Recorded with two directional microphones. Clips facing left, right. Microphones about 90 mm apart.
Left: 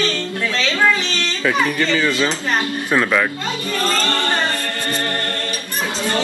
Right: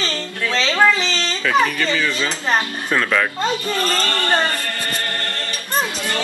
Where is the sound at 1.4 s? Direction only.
20° left (ahead or behind).